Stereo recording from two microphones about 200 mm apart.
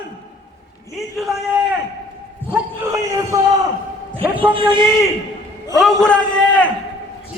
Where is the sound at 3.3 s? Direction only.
15° right (ahead or behind).